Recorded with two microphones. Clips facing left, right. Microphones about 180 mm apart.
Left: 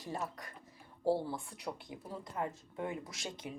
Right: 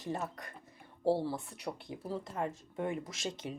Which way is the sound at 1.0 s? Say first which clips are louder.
Right 2 dB; 30° right (ahead or behind).